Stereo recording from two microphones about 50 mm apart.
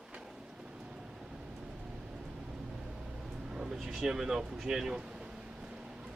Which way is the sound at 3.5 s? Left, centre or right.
Centre.